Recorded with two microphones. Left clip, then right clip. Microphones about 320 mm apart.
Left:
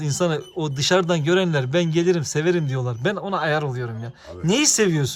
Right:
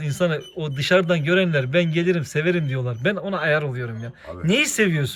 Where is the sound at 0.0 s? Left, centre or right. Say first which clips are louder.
Even; centre.